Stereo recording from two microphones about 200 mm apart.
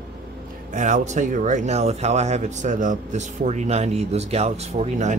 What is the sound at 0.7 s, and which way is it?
Speech, 35° right (ahead or behind).